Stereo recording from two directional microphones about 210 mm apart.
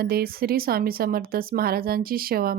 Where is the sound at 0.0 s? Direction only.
45° right (ahead or behind).